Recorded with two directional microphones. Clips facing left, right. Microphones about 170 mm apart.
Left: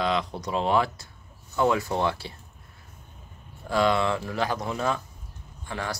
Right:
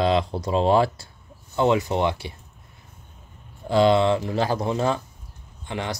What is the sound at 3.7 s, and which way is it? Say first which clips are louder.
Speech: right 6 dB; 25° right (ahead or behind).